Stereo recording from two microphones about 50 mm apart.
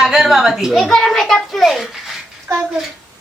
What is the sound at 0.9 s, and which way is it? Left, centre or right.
Speech, centre.